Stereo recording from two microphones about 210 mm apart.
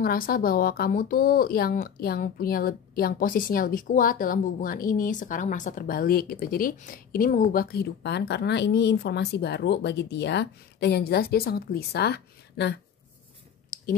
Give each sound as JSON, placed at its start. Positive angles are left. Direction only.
{"t": 0.0, "sound": "speech", "side_deg": 45}